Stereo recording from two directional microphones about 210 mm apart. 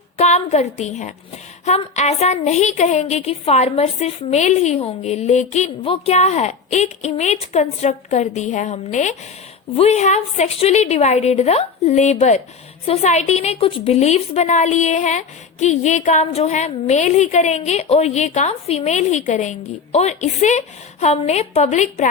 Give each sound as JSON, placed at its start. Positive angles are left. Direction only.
{"t": 0.2, "sound": "a woman's voice", "side_deg": 30}